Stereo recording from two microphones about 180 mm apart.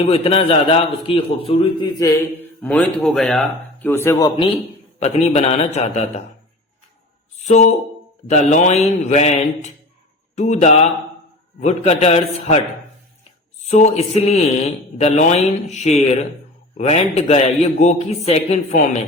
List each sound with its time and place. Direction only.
0.0 s speech: 30° left (ahead or behind)
2.6 s speech: 5° left (ahead or behind)
4.4 s speech: 35° left (ahead or behind)
7.4 s speech: 40° left (ahead or behind)
13.7 s speech: 40° left (ahead or behind)